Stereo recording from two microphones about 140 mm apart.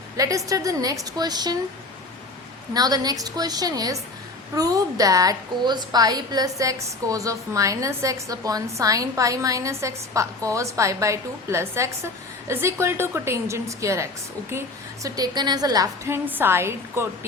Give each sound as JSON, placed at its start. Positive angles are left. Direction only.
{"t": 0.2, "sound": "a woman's voice", "side_deg": -25}
{"t": 2.7, "sound": "a woman's voice", "side_deg": -30}